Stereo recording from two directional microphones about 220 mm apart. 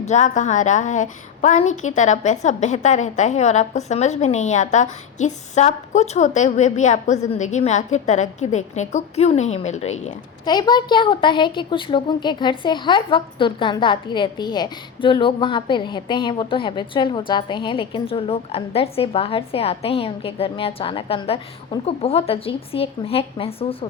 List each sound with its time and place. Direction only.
0.0 s a woman's voice: 30° left (ahead or behind)
10.4 s a woman's voice: 20° left (ahead or behind)